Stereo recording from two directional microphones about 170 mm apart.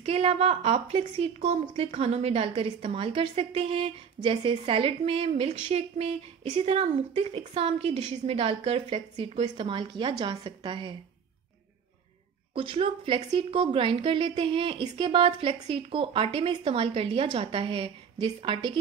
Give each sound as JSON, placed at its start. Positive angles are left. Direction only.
{"t": 0.0, "sound": "a woman's voice", "side_deg": -35}
{"t": 12.5, "sound": "a woman's voice", "side_deg": -30}